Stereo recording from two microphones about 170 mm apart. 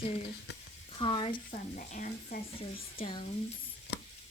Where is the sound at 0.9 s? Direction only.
35° left (ahead or behind).